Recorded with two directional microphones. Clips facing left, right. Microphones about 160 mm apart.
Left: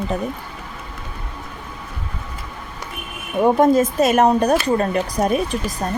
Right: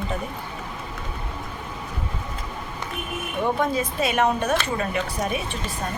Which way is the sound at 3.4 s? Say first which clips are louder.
Left 10 dB; 45° left (ahead or behind).